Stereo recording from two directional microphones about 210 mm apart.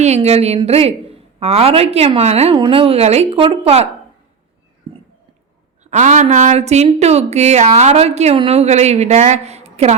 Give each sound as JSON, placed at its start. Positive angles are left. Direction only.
{"t": 0.0, "sound": "a woman's voice", "side_deg": -30}
{"t": 5.8, "sound": "a woman's voice", "side_deg": -35}